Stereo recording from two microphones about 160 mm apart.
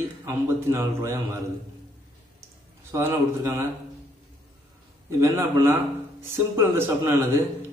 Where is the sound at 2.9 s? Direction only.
15° right (ahead or behind).